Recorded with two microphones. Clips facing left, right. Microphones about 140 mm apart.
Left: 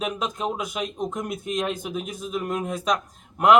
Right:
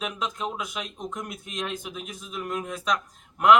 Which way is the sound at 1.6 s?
45° left (ahead or behind).